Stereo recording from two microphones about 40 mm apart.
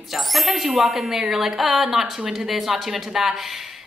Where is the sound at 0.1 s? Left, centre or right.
Centre.